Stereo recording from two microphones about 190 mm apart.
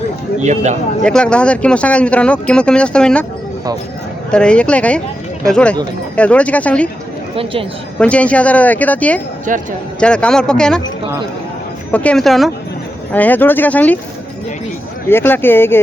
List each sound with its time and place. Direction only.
0.4 s a man's voice: 40° right (ahead or behind)
1.0 s speech: 5° left (ahead or behind)
4.3 s speech: 5° left (ahead or behind)
7.9 s speech: 5° left (ahead or behind)
9.5 s speech: 45° right (ahead or behind)
10.0 s speech: 5° left (ahead or behind)
11.9 s speech: 5° left (ahead or behind)
15.1 s speech: 10° left (ahead or behind)